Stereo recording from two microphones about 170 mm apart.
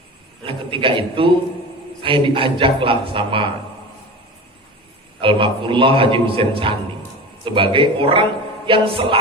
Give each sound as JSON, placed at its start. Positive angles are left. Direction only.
{"t": 0.4, "sound": "a man's voice", "side_deg": -30}
{"t": 5.2, "sound": "a man's voice", "side_deg": -30}